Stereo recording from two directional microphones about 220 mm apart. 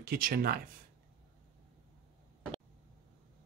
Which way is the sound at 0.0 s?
45° right (ahead or behind).